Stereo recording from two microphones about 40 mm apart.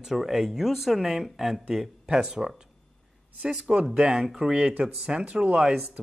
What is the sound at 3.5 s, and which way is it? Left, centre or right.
Speech, centre.